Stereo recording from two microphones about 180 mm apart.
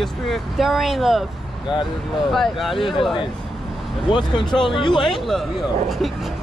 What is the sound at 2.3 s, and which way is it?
Speech, centre (ahead or behind).